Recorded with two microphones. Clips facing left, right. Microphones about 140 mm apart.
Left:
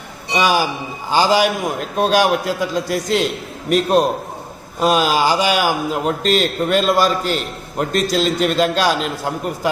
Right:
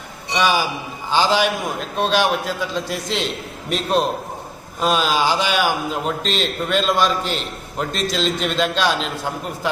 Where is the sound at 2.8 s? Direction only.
40° left (ahead or behind).